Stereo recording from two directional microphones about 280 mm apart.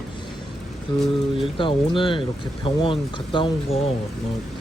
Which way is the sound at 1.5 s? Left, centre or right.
Centre.